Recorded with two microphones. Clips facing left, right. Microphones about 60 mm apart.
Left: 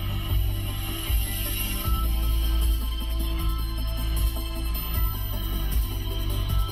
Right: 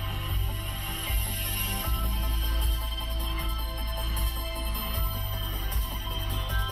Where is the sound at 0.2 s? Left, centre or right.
Right.